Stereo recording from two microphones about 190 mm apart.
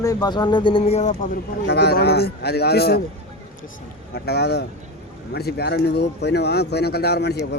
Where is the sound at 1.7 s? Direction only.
60° left (ahead or behind).